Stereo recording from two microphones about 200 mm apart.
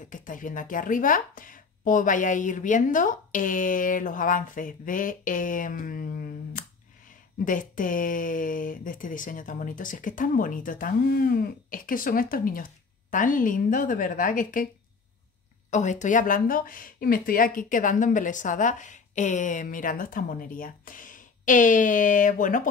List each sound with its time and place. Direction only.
0.1 s speech: 40° left (ahead or behind)
15.7 s speech: 35° left (ahead or behind)